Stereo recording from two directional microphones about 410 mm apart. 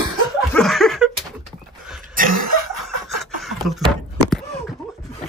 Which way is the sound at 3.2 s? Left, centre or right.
Centre.